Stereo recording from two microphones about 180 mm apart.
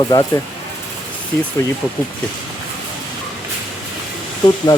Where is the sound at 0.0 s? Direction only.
25° left (ahead or behind).